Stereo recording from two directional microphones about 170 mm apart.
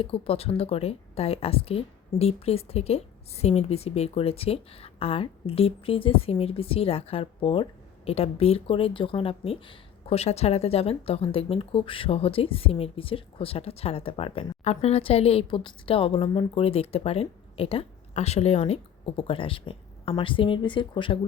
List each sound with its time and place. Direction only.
0.0 s speech: 35° left (ahead or behind)